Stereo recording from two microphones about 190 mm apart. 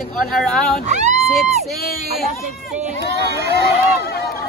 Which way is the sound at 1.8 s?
50° left (ahead or behind).